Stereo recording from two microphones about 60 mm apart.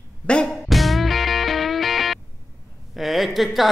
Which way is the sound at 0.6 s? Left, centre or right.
Centre.